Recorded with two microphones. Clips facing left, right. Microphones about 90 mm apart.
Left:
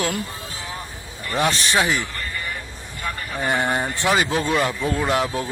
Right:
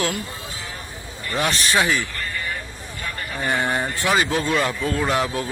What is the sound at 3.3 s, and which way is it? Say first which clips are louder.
Speech: left 1 dB; 15° left (ahead or behind).